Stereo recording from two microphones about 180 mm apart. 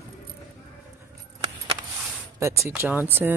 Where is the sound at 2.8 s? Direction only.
10° right (ahead or behind).